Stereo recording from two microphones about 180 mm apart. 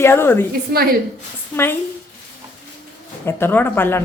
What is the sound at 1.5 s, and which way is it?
Speech, 10° left (ahead or behind).